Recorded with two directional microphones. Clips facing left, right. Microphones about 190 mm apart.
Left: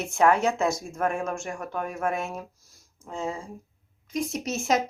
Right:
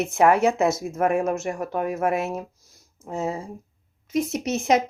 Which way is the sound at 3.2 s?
25° right (ahead or behind).